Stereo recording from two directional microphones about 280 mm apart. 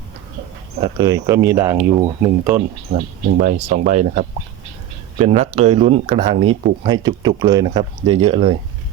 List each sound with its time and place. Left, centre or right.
0.8 s speech: centre
2.9 s speech: right